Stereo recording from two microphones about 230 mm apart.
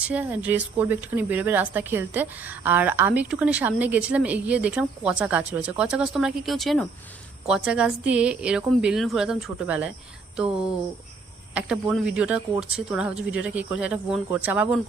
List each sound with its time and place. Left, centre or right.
0.0 s speech: centre
11.5 s speech: centre